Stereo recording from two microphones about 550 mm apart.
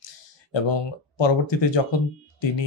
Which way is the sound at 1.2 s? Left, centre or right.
Left.